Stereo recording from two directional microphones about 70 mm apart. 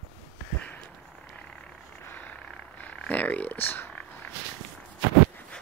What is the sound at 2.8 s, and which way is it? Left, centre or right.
Speech, left.